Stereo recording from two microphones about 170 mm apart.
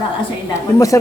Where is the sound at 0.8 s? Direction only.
20° left (ahead or behind).